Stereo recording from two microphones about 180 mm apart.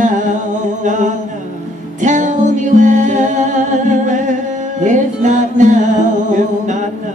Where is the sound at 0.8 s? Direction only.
45° right (ahead or behind).